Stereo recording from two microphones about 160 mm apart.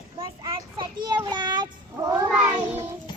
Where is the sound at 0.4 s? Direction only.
25° right (ahead or behind).